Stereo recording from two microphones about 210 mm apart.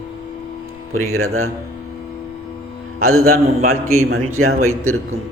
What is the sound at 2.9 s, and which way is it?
Speech, 90° right.